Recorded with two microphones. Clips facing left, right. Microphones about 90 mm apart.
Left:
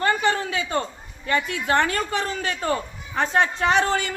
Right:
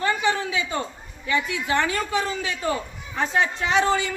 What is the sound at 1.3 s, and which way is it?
Speech, 50° left (ahead or behind).